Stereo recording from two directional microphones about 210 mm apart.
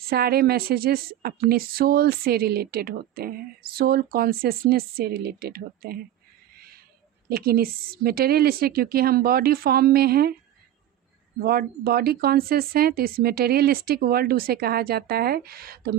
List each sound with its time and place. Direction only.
0.0 s a woman's voice: 45° right (ahead or behind)
7.3 s a woman's voice: 45° right (ahead or behind)
11.3 s a woman's voice: 45° right (ahead or behind)